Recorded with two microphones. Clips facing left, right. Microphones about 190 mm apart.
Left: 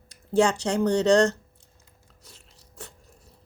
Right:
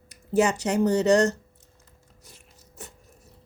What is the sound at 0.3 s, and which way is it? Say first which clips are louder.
Speech: even; 20° right (ahead or behind).